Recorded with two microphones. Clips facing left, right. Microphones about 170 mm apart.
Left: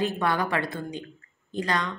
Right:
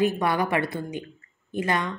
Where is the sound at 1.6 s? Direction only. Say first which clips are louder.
Right 2 dB; 20° right (ahead or behind).